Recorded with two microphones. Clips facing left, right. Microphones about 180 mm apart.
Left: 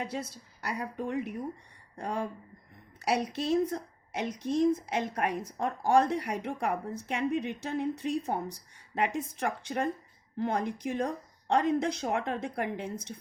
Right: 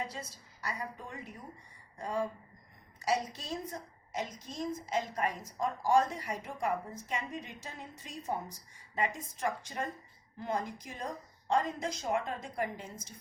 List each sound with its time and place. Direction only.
0.0 s a woman's voice: 65° left (ahead or behind)